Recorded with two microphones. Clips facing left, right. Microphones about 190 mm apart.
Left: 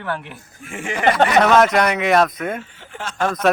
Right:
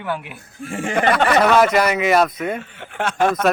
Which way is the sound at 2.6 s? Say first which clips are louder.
Right 6 dB; 60° right (ahead or behind).